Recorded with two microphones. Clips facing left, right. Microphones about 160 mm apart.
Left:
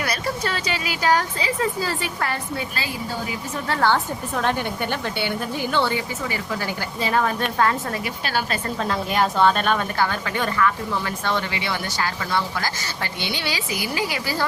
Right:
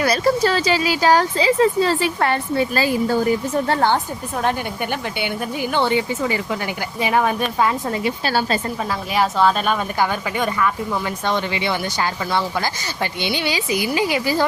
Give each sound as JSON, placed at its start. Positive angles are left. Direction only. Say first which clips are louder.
{"t": 0.0, "sound": "a woman's voice", "louder": "right 9 dB", "side_deg": -35}
{"t": 2.7, "sound": "speech", "louder": "right 10 dB", "side_deg": -50}
{"t": 4.4, "sound": "a woman's voice", "louder": "right 2 dB", "side_deg": -15}
{"t": 8.0, "sound": "a woman's voice", "louder": "right 5 dB", "side_deg": -30}
{"t": 8.8, "sound": "a woman's voice", "louder": "left 2 dB", "side_deg": -5}